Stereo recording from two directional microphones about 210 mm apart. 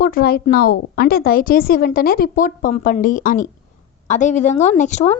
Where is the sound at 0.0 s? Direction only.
45° left (ahead or behind).